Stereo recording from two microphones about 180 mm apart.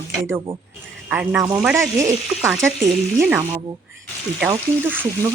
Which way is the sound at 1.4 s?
20° right (ahead or behind).